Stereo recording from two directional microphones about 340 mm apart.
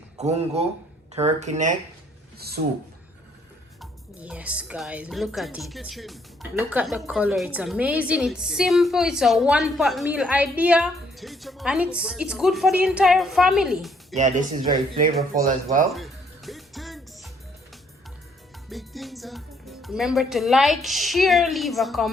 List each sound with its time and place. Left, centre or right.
0.2 s speech: centre
3.8 s speech: centre
14.2 s speech: right
15.9 s music: centre
18.7 s speech: centre